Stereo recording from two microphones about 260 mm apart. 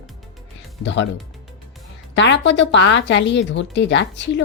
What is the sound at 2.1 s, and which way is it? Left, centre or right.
Speech, left.